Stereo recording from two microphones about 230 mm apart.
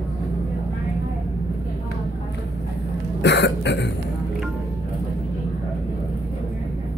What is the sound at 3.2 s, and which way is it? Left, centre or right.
Cough, left.